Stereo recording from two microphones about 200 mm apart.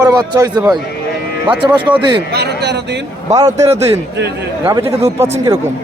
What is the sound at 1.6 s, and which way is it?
Speech, 20° right (ahead or behind).